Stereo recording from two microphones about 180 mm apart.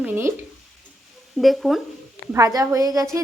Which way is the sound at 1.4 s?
Centre (ahead or behind).